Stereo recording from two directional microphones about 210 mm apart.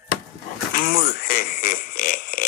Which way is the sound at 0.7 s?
45° left (ahead or behind).